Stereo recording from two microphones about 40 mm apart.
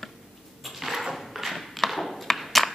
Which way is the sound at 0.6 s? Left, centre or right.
Centre.